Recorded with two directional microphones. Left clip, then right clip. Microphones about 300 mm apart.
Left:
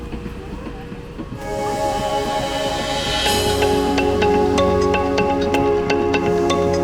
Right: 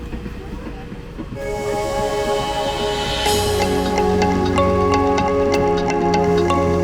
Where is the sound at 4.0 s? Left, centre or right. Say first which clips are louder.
Even; centre.